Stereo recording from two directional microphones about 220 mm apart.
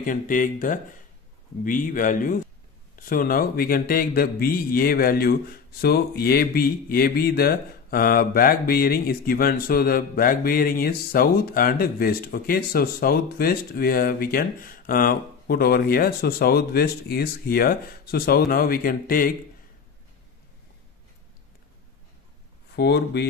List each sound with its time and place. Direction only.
0.0 s a man's voice: 40° left (ahead or behind)
22.8 s speech: 50° left (ahead or behind)